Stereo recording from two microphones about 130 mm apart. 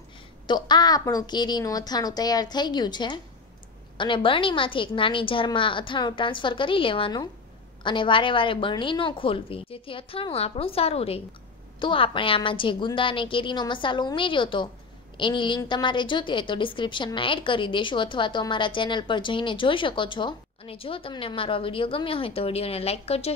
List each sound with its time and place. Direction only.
0.5 s a woman's voice: 35° left (ahead or behind); by 23.3 s 50° left (ahead or behind)